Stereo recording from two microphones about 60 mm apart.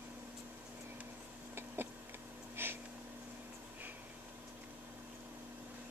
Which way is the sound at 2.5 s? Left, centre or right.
Right.